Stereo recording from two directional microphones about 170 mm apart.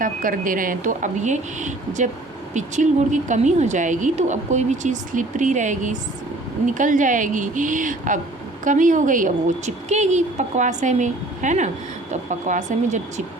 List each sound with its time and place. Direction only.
0.0 s a woman's voice: 55° right (ahead or behind)